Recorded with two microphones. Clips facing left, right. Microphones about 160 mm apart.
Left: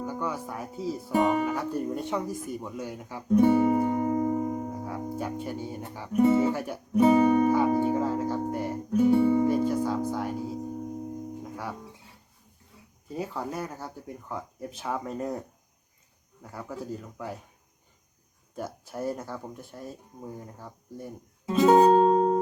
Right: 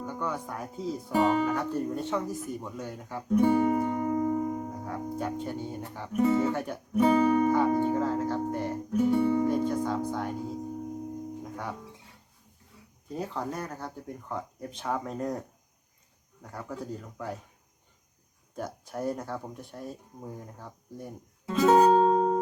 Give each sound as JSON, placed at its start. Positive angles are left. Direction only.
{"t": 0.0, "sound": "speech", "side_deg": 10}
{"t": 4.9, "sound": "speech", "side_deg": 5}
{"t": 7.0, "sound": "speech", "side_deg": 20}
{"t": 7.4, "sound": "music", "side_deg": 10}
{"t": 9.2, "sound": "music", "side_deg": 20}
{"t": 9.5, "sound": "music", "side_deg": 5}
{"t": 13.1, "sound": "speech", "side_deg": 5}
{"t": 18.5, "sound": "speech", "side_deg": 5}
{"t": 21.4, "sound": "music", "side_deg": 20}
{"t": 21.9, "sound": "music", "side_deg": 5}